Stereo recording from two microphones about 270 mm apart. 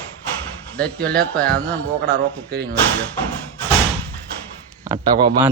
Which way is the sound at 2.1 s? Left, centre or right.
Right.